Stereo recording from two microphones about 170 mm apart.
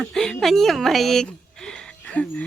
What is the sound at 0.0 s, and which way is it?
Speech, 5° left (ahead or behind).